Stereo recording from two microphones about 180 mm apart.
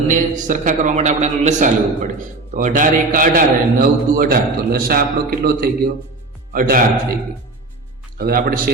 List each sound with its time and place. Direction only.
0.1 s a man's voice: 45° right (ahead or behind)
8.2 s a man's voice: 55° right (ahead or behind)